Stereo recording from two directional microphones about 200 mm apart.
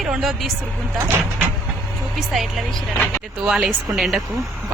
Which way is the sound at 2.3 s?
Centre (ahead or behind).